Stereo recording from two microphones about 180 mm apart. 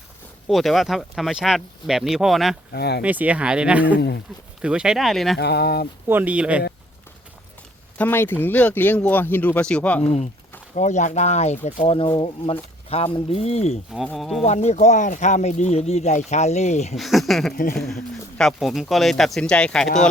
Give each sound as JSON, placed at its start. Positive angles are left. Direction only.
{"t": 0.4, "sound": "speech", "side_deg": 0}
{"t": 2.7, "sound": "speech", "side_deg": 65}
{"t": 3.0, "sound": "speech", "side_deg": -10}
{"t": 3.9, "sound": "speech", "side_deg": 70}
{"t": 4.6, "sound": "speech", "side_deg": -5}
{"t": 5.4, "sound": "speech", "side_deg": 65}
{"t": 6.1, "sound": "speech", "side_deg": -10}
{"t": 7.9, "sound": "speech", "side_deg": 10}
{"t": 10.0, "sound": "speech", "side_deg": 40}
{"t": 13.9, "sound": "speech", "side_deg": 0}
{"t": 14.4, "sound": "speech", "side_deg": 40}
{"t": 17.0, "sound": "speech", "side_deg": 0}